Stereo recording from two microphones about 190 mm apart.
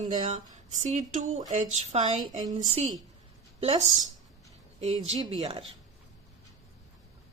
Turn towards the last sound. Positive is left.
turn(degrees=-25)  # may be behind; listen again after turning